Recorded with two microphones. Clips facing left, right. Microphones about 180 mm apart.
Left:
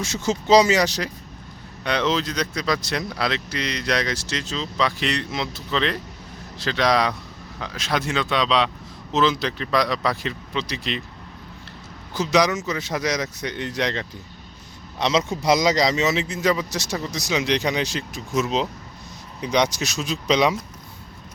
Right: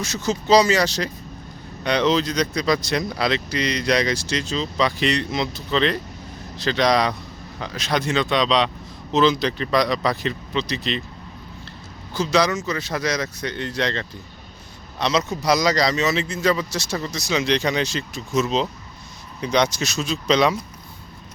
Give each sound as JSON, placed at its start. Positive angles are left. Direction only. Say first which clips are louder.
{"t": 0.1, "sound": "speech", "louder": "even", "side_deg": 25}
{"t": 1.8, "sound": "speech", "louder": "right 3 dB", "side_deg": 5}
{"t": 12.1, "sound": "a man's voice", "louder": "even", "side_deg": 20}